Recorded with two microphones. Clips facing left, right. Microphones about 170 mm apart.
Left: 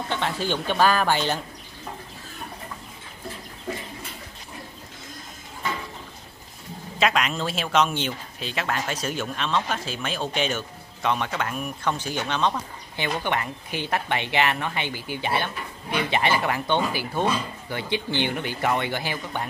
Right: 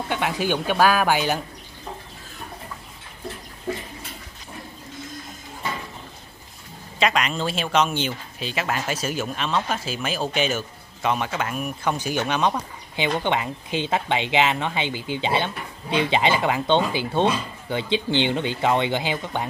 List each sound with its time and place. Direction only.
0.1 s speech: 10° right (ahead or behind)
7.0 s speech: centre (ahead or behind); by 19.4 s 20° right (ahead or behind)